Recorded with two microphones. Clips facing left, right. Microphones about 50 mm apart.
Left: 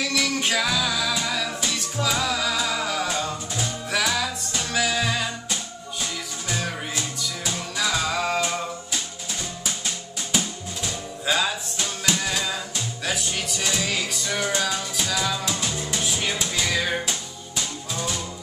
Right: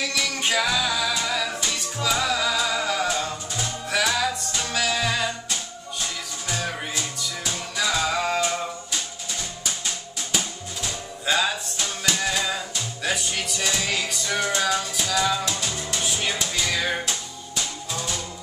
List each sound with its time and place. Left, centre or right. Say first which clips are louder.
0.0 s music: left 2 dB; centre
10.3 s music: left 2 dB; centre